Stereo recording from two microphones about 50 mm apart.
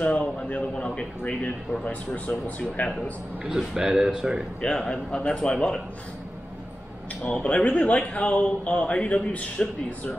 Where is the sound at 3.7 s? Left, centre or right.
Centre.